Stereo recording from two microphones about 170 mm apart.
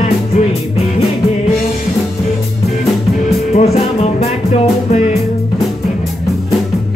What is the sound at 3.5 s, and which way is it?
Music, 40° left (ahead or behind).